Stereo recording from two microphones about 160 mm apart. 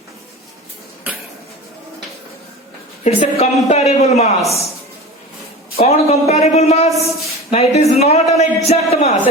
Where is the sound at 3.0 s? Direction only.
40° left (ahead or behind).